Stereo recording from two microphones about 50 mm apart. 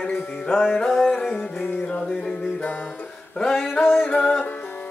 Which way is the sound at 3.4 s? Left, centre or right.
Centre.